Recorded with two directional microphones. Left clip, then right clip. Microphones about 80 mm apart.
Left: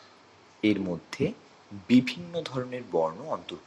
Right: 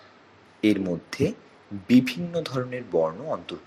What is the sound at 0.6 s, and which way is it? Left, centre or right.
Speech, right.